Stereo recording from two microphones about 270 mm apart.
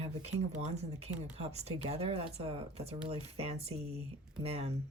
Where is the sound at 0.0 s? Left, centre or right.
Right.